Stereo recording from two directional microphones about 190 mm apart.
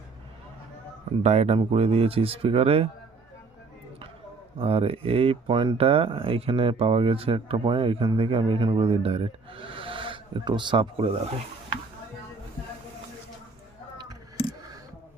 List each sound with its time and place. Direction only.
1.2 s speech: 35° right (ahead or behind)
4.5 s speech: 30° right (ahead or behind)